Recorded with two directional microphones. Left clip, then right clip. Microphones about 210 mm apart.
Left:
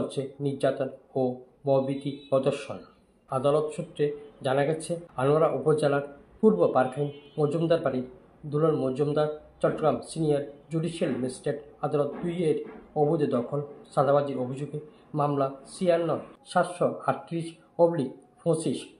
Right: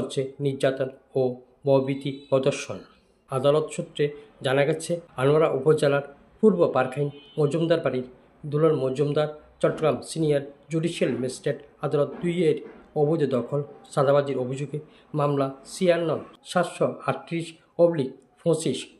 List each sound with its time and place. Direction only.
0.1 s speech: 50° right (ahead or behind)